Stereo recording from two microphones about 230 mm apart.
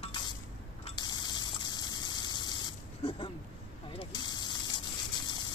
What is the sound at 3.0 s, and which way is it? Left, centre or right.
Speech, left.